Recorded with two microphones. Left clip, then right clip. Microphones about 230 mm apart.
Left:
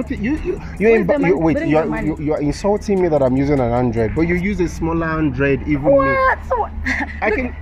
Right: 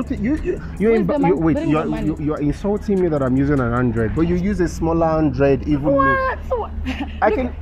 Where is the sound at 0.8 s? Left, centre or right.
Left.